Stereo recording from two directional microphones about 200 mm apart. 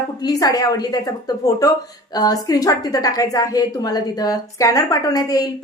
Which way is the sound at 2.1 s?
20° left (ahead or behind).